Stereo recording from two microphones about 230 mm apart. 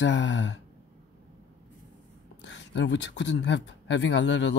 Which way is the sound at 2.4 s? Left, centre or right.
Left.